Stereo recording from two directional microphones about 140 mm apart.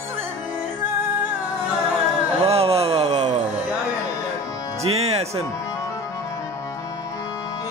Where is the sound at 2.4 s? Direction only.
45° right (ahead or behind).